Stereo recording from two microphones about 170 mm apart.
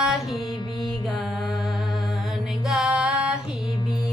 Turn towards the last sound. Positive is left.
turn(degrees=-5)  # may be behind; listen again after turning